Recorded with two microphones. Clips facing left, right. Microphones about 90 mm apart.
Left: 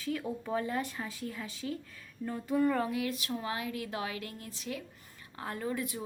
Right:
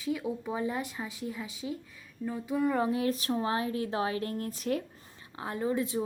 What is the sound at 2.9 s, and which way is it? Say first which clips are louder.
Speech: right 5 dB; 35° right (ahead or behind).